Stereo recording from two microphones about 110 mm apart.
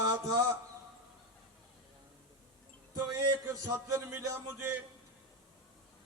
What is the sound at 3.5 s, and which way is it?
A man's voice, 25° right (ahead or behind).